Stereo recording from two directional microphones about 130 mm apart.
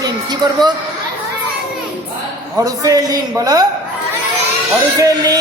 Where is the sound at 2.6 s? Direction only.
30° right (ahead or behind).